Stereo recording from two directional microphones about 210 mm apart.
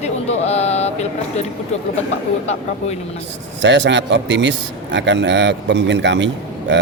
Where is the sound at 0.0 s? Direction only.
30° left (ahead or behind).